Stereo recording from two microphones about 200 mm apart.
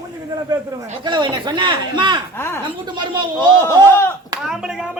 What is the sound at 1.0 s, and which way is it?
Speech, 25° right (ahead or behind).